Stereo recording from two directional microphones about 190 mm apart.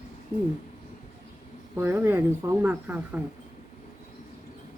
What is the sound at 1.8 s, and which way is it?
Speech, 10° right (ahead or behind).